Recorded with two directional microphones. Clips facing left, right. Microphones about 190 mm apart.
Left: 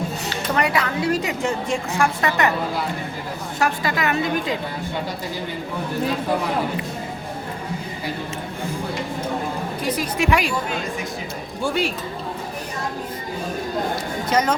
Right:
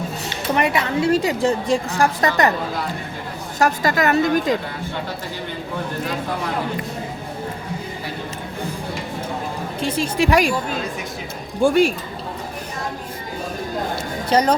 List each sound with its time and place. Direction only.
0.5 s a woman's voice: 25° right (ahead or behind)
3.6 s a woman's voice: 45° right (ahead or behind)
9.8 s a woman's voice: 30° right (ahead or behind)
11.6 s a woman's voice: 45° right (ahead or behind)
14.3 s a woman's voice: 35° right (ahead or behind)